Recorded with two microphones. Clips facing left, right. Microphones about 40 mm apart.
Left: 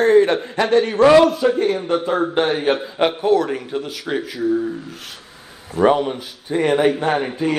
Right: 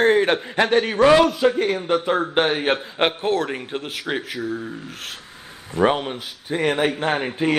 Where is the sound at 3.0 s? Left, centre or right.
Right.